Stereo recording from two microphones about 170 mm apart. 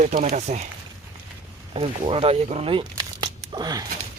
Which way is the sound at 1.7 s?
35° right (ahead or behind).